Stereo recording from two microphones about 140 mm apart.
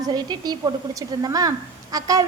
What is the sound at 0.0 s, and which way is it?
A woman's voice, 30° right (ahead or behind).